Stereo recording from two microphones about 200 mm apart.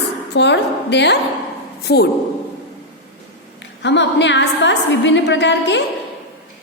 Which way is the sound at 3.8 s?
60° left (ahead or behind).